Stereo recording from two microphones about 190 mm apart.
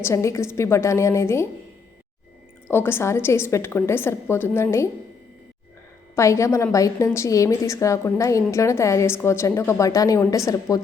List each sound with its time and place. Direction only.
0.0 s a woman's voice: 15° left (ahead or behind)
2.6 s a woman's voice: 10° left (ahead or behind)
6.1 s a woman's voice: 15° left (ahead or behind)